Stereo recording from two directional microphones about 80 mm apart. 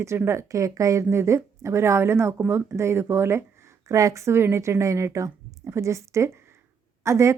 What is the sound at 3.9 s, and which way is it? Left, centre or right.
Speech, right.